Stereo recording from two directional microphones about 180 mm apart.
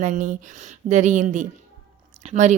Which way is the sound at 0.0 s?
45° right (ahead or behind).